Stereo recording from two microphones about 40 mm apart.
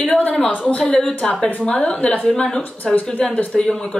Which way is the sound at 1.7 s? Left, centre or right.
Left.